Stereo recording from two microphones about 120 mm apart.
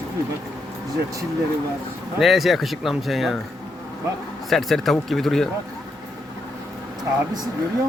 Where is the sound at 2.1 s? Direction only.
Centre (ahead or behind).